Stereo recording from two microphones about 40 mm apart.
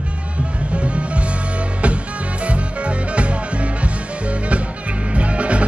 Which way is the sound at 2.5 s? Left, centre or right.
Right.